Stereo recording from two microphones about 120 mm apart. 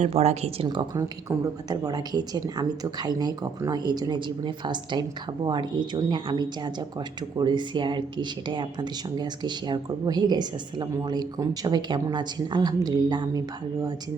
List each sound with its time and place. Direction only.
0.0 s speech: 65° right (ahead or behind)
1.7 s speech: 30° right (ahead or behind)